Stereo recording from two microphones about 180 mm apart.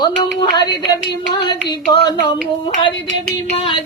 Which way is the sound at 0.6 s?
25° left (ahead or behind).